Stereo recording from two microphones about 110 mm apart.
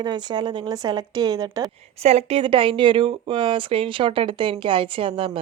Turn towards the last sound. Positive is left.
turn(degrees=-55)  # may be behind; listen again after turning